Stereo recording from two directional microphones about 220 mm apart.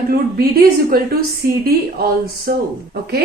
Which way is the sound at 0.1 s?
45° right (ahead or behind).